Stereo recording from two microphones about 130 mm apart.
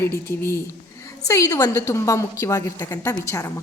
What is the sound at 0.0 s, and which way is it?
A woman's voice, 20° left (ahead or behind).